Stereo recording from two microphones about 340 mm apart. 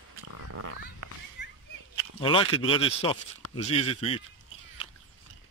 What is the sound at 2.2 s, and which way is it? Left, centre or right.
Speech, centre.